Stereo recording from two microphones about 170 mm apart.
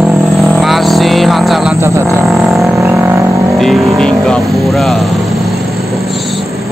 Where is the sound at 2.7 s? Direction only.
15° right (ahead or behind).